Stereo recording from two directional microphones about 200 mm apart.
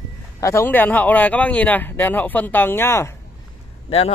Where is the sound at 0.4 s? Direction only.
15° left (ahead or behind).